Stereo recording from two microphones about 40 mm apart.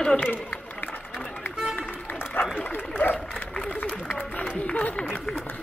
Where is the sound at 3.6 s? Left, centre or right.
Left.